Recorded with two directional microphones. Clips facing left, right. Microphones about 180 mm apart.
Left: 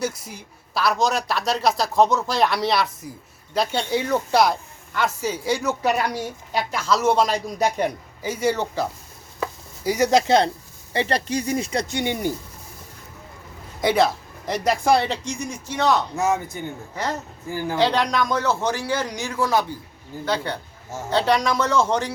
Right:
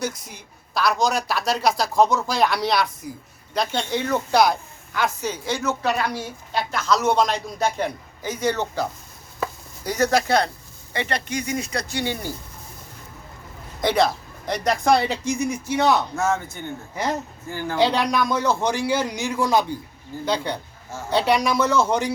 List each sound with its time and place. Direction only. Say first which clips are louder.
0.3 s a woman's voice: left 3 dB; 5° left (ahead or behind)
9.4 s chopping: left 1 dB; 10° left (ahead or behind)
10.1 s speech: left 5 dB; 20° left (ahead or behind)
13.8 s a woman's voice: left 1 dB; 5° left (ahead or behind)
16.1 s a man's voice: left 1 dB; 15° left (ahead or behind)
16.9 s a man's voice: right 3 dB; 15° right (ahead or behind)